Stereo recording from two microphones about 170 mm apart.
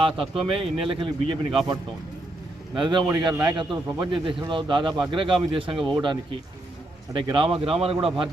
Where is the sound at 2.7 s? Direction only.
30° right (ahead or behind).